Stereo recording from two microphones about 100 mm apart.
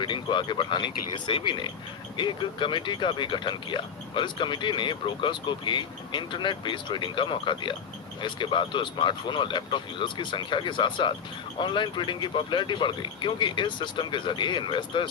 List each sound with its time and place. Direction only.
0.0 s speech: 50° left (ahead or behind)